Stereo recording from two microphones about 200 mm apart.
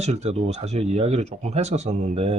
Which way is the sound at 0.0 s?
35° right (ahead or behind).